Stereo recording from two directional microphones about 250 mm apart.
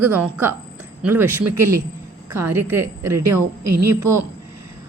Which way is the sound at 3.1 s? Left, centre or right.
Right.